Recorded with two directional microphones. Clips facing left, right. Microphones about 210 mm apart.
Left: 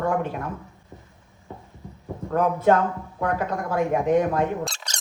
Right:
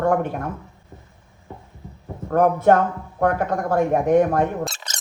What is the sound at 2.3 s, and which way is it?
Speech, 50° right (ahead or behind).